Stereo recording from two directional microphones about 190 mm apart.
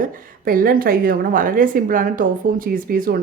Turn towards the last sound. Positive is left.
turn(degrees=-50)  # may be behind; listen again after turning